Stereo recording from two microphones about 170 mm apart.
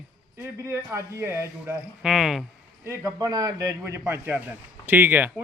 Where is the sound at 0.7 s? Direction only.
15° right (ahead or behind).